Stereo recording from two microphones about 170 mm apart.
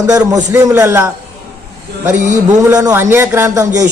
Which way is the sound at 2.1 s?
45° right (ahead or behind).